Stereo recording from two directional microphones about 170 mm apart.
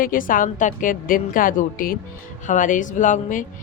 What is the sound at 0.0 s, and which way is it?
Speech, 55° left (ahead or behind).